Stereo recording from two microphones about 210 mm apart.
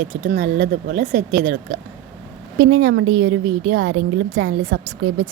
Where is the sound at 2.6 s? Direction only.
70° right (ahead or behind).